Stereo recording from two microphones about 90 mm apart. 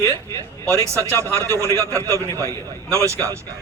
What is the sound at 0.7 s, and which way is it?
A man's voice, 30° right (ahead or behind).